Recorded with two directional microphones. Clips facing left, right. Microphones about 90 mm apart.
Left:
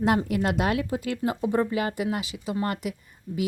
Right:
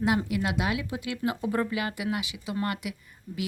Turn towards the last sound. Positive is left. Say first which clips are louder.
# left 5 dB
turn(degrees=35)  # may be behind; listen again after turning